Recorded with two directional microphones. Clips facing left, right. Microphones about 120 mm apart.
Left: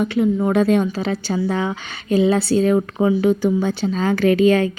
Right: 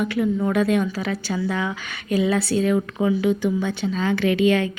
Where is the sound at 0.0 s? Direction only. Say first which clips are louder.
Left 4 dB; 30° left (ahead or behind).